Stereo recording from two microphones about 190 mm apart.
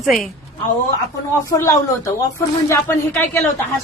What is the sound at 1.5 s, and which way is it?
A woman's voice, 15° left (ahead or behind).